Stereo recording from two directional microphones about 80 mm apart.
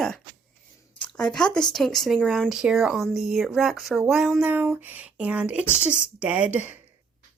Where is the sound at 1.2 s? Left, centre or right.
Centre.